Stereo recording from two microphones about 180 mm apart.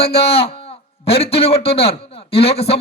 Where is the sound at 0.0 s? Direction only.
35° left (ahead or behind).